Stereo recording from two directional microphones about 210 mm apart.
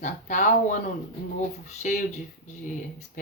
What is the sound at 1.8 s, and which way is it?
Speech, 40° left (ahead or behind).